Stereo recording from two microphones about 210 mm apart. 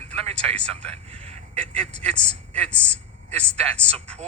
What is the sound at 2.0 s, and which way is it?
A man's voice, 5° left (ahead or behind).